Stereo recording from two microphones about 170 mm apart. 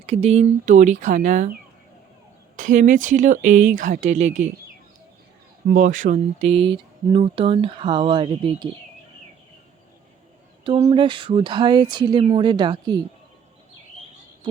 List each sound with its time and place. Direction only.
0.0 s speech: 40° right (ahead or behind)
2.6 s speech: 50° right (ahead or behind)
5.7 s speech: 50° right (ahead or behind)
6.5 s a sound: 30° right (ahead or behind)
10.6 s speech: 30° right (ahead or behind)